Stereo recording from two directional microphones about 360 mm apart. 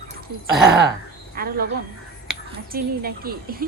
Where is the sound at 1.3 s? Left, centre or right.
Right.